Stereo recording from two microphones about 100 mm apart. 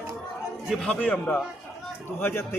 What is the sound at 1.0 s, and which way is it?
A man's voice, 15° left (ahead or behind).